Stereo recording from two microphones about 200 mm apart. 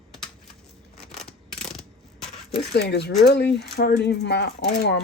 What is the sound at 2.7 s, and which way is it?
Speech, 55° left (ahead or behind).